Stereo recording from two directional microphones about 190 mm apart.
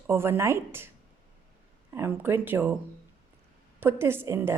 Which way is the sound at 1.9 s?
10° right (ahead or behind).